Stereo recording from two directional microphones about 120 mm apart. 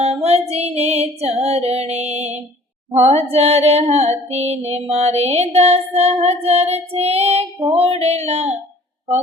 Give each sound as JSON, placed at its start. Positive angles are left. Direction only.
{"t": 0.0, "sound": "female singing", "side_deg": -60}
{"t": 1.5, "sound": "music", "side_deg": -60}
{"t": 2.9, "sound": "female singing", "side_deg": -65}